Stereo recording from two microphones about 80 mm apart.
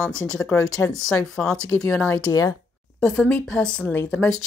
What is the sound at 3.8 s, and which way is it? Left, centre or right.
Speech, left.